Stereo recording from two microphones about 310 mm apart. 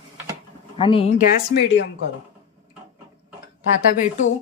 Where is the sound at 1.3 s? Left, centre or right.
Left.